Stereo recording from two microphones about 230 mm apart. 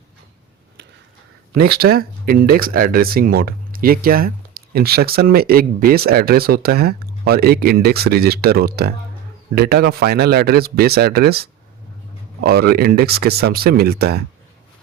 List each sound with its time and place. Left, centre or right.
1.8 s speech: right